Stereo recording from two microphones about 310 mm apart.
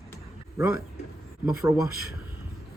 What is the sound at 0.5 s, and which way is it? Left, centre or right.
A man's voice, centre.